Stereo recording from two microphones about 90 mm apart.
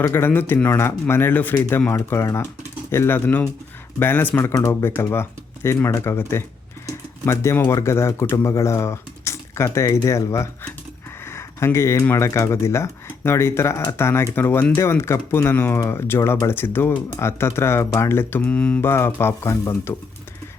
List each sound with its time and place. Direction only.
0.0 s speech: 25° left (ahead or behind)
6.8 s pigeon: 30° left (ahead or behind)
7.8 s speech: 30° left (ahead or behind)
11.3 s a sound: 30° left (ahead or behind)
12.1 s speech: 30° left (ahead or behind)
18.4 s mantra: 10° left (ahead or behind)
18.8 s speech: 25° left (ahead or behind)